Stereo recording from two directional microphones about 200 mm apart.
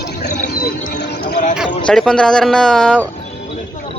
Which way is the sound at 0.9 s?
40° left (ahead or behind).